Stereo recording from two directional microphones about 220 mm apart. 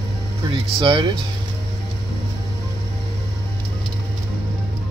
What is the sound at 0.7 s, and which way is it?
Speech, 20° right (ahead or behind).